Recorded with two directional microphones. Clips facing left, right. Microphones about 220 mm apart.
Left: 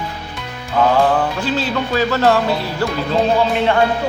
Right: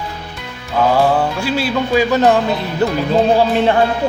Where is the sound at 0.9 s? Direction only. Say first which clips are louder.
Right 1 dB; 10° right (ahead or behind).